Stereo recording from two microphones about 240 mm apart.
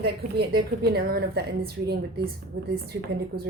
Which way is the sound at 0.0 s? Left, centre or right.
Right.